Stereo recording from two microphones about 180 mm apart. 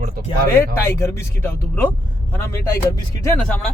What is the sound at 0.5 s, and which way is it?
Speech, 15° left (ahead or behind).